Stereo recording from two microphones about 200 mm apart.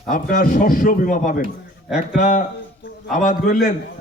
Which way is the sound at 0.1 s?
45° left (ahead or behind).